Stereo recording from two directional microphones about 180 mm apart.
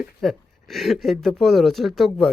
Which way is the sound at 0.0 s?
Centre (ahead or behind).